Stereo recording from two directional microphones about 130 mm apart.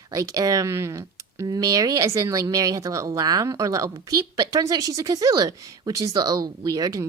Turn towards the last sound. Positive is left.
turn(degrees=-30)  # may be behind; listen again after turning